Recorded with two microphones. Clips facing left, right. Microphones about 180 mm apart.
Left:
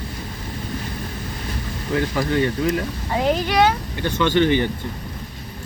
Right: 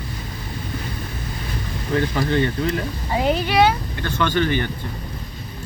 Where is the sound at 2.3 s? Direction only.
15° left (ahead or behind).